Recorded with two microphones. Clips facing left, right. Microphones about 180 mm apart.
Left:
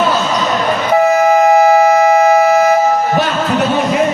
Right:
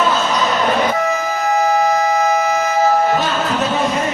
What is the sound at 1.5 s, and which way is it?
Music, 65° left (ahead or behind).